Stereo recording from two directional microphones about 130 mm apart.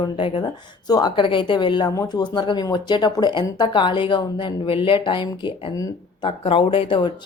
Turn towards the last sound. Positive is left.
turn(degrees=45)  # may be behind; listen again after turning